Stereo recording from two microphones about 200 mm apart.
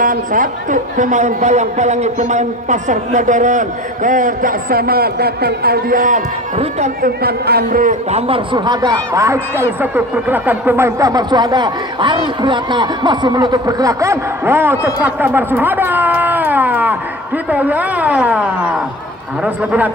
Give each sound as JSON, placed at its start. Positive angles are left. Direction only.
{"t": 0.0, "sound": "a man's voice", "side_deg": -45}
{"t": 7.2, "sound": "a man's voice", "side_deg": -50}
{"t": 8.3, "sound": "speech", "side_deg": -20}
{"t": 15.0, "sound": "a sound", "side_deg": -10}
{"t": 17.5, "sound": "a man's voice", "side_deg": -10}